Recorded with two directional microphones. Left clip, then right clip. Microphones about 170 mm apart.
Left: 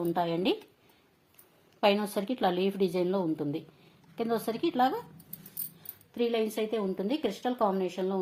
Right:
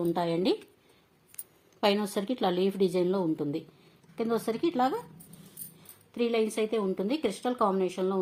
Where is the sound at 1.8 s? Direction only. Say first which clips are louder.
Left 1 dB; centre (ahead or behind).